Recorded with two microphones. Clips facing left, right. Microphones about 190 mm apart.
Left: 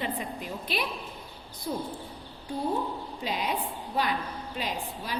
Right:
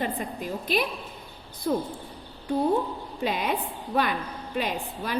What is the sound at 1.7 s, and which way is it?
Speech, 60° right (ahead or behind).